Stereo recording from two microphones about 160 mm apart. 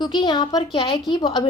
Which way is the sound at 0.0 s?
25° left (ahead or behind).